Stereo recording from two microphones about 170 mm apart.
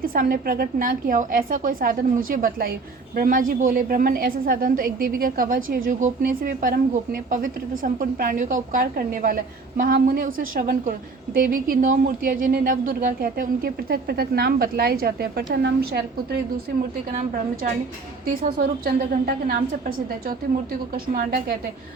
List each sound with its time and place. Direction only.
0.0 s a woman's voice: 55° right (ahead or behind); by 16.4 s 75° right (ahead or behind)
18.4 s speech: 60° right (ahead or behind)